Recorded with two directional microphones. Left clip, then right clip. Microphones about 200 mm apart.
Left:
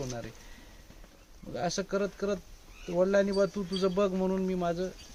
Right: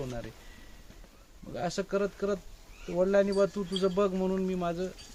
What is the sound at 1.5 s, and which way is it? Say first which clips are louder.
Speech: even; 15° left (ahead or behind).